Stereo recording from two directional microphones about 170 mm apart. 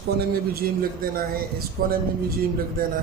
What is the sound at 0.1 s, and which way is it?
Speech, 70° right (ahead or behind).